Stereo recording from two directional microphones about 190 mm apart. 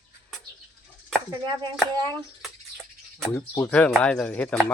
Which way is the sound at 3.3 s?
15° left (ahead or behind).